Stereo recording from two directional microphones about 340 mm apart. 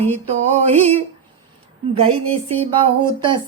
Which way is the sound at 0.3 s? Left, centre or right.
Centre.